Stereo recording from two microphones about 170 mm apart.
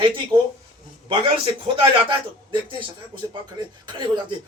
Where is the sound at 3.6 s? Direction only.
25° right (ahead or behind).